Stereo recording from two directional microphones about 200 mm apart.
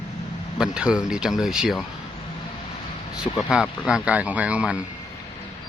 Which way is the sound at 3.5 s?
5° right (ahead or behind).